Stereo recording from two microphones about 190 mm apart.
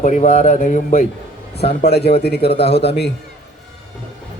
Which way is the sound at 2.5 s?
30° left (ahead or behind).